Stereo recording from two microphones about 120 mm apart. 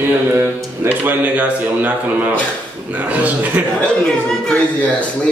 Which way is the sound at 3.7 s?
5° left (ahead or behind).